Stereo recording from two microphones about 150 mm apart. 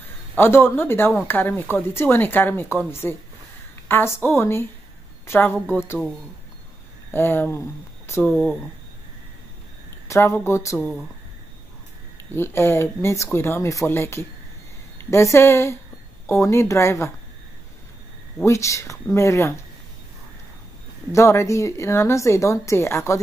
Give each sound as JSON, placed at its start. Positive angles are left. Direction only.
{"t": 0.4, "sound": "speech", "side_deg": 15}
{"t": 7.1, "sound": "speech", "side_deg": 15}
{"t": 10.0, "sound": "speech", "side_deg": 20}
{"t": 10.8, "sound": "speech", "side_deg": 0}
{"t": 12.4, "sound": "speech", "side_deg": 15}
{"t": 18.4, "sound": "speech", "side_deg": 20}
{"t": 21.1, "sound": "speech", "side_deg": 20}